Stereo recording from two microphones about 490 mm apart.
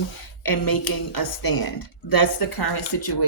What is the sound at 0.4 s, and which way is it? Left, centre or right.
Speech, left.